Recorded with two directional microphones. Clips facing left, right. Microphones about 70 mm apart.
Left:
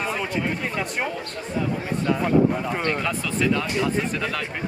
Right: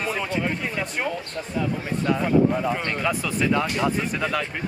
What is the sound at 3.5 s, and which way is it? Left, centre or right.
Speech, centre.